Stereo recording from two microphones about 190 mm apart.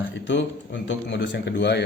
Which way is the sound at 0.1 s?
70° left (ahead or behind).